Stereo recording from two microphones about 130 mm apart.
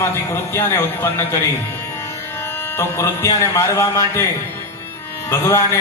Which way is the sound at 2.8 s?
20° left (ahead or behind).